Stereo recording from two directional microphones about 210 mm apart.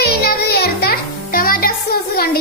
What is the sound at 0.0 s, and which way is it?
Music, 50° left (ahead or behind).